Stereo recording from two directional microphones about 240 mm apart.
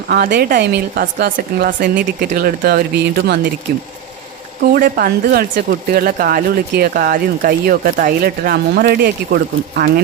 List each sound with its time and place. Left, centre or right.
0.1 s speech: right